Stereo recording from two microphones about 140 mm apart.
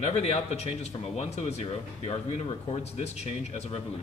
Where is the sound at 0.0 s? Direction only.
50° left (ahead or behind).